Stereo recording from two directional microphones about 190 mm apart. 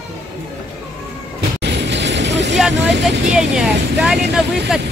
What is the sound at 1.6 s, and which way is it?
Vehicle, 65° right (ahead or behind).